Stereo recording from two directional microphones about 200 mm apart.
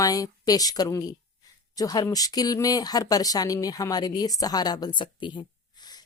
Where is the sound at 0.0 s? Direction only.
20° left (ahead or behind).